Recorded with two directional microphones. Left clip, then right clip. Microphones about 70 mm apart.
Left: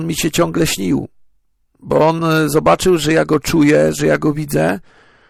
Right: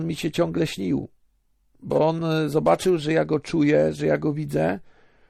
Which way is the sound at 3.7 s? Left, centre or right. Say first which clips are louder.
Left 6 dB; left.